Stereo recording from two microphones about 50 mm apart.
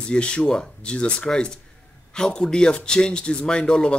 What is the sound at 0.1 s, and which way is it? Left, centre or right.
Speech, centre.